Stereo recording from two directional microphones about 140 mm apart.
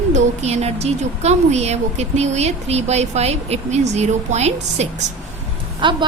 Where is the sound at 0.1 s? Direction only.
55° right (ahead or behind).